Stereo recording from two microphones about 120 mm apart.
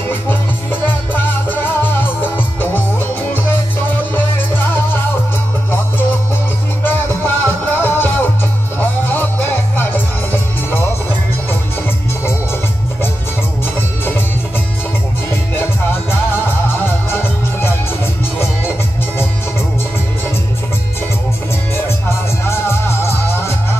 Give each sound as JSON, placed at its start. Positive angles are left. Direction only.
{"t": 0.1, "sound": "music", "side_deg": 15}
{"t": 6.8, "sound": "music", "side_deg": 15}
{"t": 15.5, "sound": "music", "side_deg": 20}
{"t": 22.5, "sound": "music", "side_deg": 20}